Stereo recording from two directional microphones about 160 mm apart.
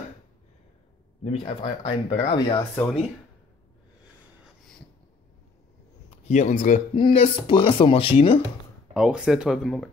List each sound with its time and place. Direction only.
1.2 s speech: 40° left (ahead or behind)
1.8 s speech: 25° left (ahead or behind)
2.8 s speech: 5° left (ahead or behind)
6.2 s speech: 45° left (ahead or behind)
7.1 s speech: 35° left (ahead or behind)
8.9 s speech: 5° right (ahead or behind)